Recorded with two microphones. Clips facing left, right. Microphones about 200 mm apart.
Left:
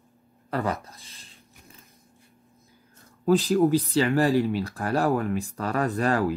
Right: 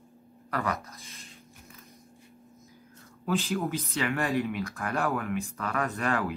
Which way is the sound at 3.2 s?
35° left (ahead or behind).